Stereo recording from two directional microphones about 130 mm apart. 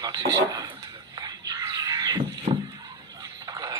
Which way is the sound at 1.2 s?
30° right (ahead or behind).